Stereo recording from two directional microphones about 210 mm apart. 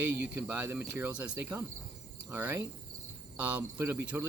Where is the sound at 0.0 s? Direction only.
10° right (ahead or behind).